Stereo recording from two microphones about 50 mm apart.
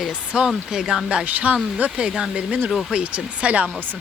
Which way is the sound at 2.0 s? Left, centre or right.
Centre.